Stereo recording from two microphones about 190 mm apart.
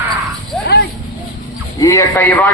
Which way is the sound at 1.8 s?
15° left (ahead or behind).